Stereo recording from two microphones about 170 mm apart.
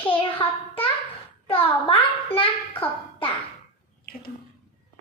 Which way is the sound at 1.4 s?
35° left (ahead or behind).